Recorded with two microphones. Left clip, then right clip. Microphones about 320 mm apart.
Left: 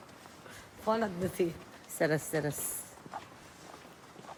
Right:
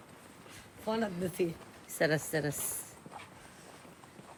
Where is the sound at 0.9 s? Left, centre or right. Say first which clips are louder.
Left 3 dB; centre.